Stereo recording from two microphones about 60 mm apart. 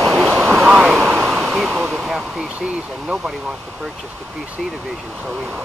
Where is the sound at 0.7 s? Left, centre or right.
Centre.